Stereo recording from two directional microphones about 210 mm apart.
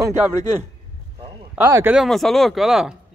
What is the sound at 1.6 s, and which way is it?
Speech, 15° right (ahead or behind).